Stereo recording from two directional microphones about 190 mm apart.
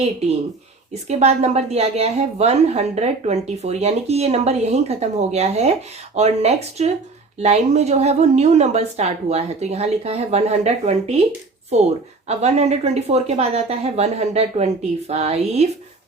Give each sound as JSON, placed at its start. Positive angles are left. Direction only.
{"t": 1.0, "sound": "a woman's voice", "side_deg": -35}
{"t": 12.3, "sound": "a woman's voice", "side_deg": -35}